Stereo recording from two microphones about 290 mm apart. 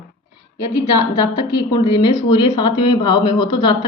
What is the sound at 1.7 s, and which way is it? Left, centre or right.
Speech, centre.